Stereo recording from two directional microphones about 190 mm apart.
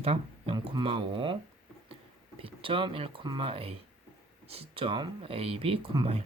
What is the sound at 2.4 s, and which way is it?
Speech, 30° right (ahead or behind).